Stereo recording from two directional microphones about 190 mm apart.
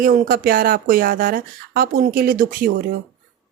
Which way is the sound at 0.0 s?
50° right (ahead or behind).